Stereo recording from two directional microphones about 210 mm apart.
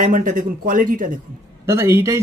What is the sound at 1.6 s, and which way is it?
Speech, 15° right (ahead or behind).